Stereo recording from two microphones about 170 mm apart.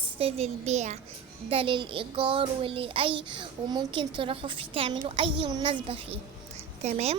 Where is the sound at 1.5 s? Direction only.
30° right (ahead or behind).